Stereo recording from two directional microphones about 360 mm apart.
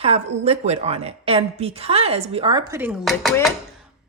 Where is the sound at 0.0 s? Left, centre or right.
Centre.